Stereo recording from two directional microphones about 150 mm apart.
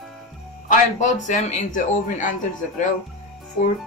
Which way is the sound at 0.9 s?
50° left (ahead or behind).